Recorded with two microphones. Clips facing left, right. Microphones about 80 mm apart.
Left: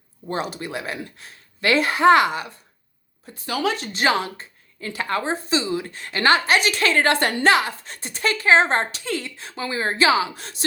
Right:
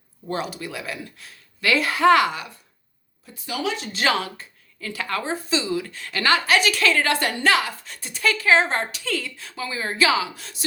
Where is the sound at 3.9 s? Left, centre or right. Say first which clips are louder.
Even; left.